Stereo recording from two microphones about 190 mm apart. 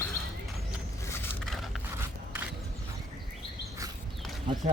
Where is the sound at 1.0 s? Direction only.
15° left (ahead or behind).